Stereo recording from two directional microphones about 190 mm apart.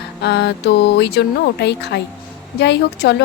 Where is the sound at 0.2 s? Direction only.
60° left (ahead or behind).